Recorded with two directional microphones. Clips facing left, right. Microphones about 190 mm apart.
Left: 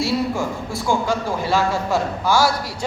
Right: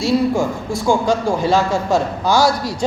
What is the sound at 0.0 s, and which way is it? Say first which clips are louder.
A man's voice: right 5 dB; 15° right (ahead or behind).